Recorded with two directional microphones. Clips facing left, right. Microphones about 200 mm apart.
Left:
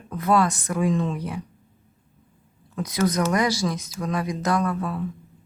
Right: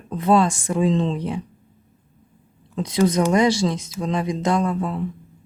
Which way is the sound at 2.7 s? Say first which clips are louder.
Right 4 dB; 25° right (ahead or behind).